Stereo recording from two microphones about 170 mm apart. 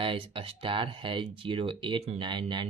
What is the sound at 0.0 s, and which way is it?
Speech, 30° right (ahead or behind).